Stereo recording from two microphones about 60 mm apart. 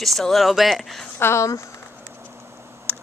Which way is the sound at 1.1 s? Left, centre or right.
Left.